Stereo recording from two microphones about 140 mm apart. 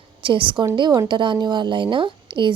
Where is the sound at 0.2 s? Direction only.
35° right (ahead or behind).